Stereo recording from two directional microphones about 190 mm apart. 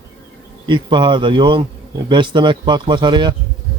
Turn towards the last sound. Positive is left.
turn(degrees=-25)  # may be behind; listen again after turning